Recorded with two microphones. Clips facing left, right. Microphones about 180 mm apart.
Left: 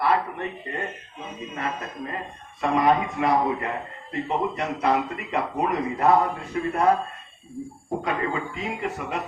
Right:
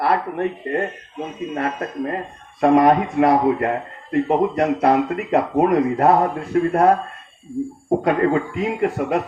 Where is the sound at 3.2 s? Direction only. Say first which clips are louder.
Right 7 dB; 50° right (ahead or behind).